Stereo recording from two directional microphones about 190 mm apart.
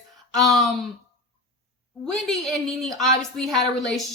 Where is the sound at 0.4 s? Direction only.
Centre (ahead or behind).